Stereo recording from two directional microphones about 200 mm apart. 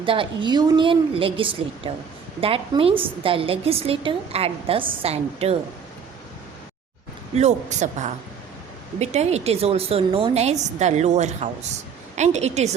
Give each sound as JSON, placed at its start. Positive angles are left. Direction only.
{"t": 0.0, "sound": "a woman's voice", "side_deg": -25}
{"t": 7.3, "sound": "a woman's voice", "side_deg": -35}